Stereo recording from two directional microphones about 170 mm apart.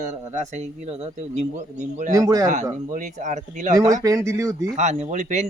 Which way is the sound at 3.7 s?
20° right (ahead or behind).